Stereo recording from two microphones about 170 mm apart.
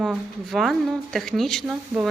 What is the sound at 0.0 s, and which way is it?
Speech, centre (ahead or behind).